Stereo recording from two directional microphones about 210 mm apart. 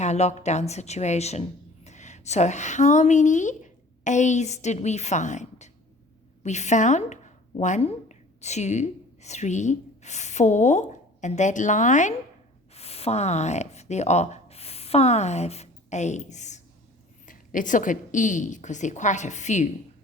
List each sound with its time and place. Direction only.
0.0 s a woman's voice: 30° left (ahead or behind)